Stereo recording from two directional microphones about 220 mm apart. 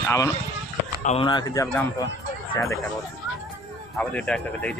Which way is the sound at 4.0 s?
5° left (ahead or behind).